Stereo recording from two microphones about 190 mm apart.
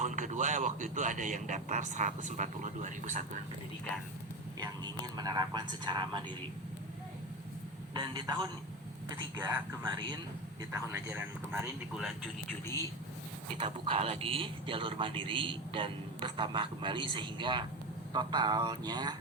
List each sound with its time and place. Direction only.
0.0 s speech: 40° right (ahead or behind)
4.6 s speech: 20° right (ahead or behind)
7.9 s speech: 25° right (ahead or behind); by 12.3 s 5° right (ahead or behind)
13.6 s speech: 30° right (ahead or behind)